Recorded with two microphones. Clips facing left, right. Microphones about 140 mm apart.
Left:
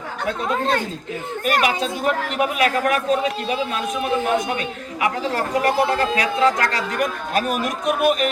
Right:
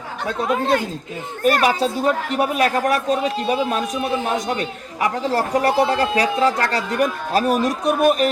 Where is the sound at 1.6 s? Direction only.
35° right (ahead or behind).